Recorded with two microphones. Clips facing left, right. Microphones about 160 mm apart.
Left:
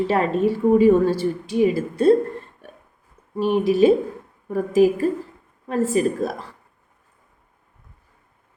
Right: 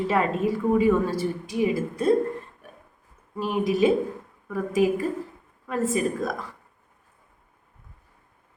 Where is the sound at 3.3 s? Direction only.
30° left (ahead or behind).